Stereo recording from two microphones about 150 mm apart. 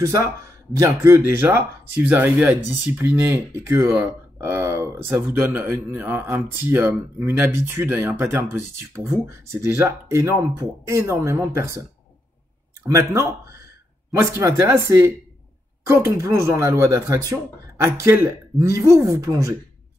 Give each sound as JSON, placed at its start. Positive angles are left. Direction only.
{"t": 0.0, "sound": "speech", "side_deg": -20}
{"t": 12.8, "sound": "speech", "side_deg": -20}